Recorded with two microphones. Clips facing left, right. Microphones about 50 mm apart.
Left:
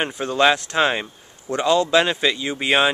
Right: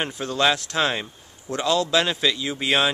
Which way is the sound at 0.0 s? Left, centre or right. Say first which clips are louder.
Left 4 dB; centre.